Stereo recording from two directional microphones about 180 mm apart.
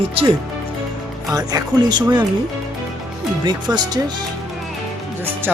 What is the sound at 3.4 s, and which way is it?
Speech, 25° right (ahead or behind).